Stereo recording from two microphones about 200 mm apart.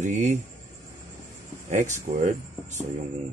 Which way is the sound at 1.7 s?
40° right (ahead or behind).